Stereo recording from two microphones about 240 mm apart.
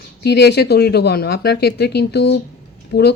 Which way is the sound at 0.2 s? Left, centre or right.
Left.